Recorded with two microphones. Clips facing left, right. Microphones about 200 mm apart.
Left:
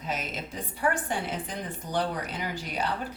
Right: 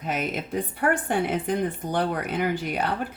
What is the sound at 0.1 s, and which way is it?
Speech, 60° right (ahead or behind).